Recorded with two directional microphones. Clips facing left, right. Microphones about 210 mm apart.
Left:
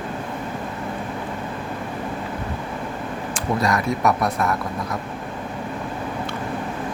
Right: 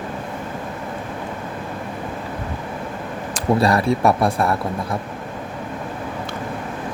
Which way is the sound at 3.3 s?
30° right (ahead or behind).